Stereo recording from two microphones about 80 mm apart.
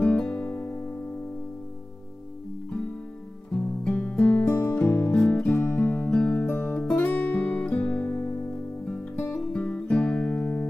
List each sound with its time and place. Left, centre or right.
0.0 s music: centre
3.5 s music: centre
4.6 s music: left
5.3 s music: centre